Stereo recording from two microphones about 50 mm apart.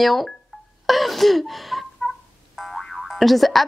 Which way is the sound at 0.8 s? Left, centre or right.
Centre.